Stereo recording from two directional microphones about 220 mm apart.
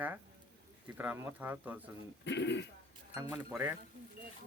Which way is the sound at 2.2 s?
55° left (ahead or behind).